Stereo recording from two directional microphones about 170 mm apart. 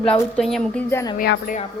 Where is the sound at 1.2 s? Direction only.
55° left (ahead or behind).